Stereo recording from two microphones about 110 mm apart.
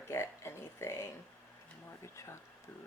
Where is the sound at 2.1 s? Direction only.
25° left (ahead or behind).